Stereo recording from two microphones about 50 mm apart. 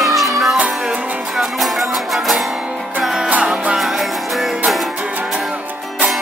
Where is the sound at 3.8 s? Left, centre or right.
Centre.